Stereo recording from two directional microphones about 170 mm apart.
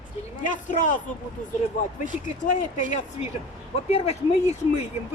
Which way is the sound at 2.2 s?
45° left (ahead or behind).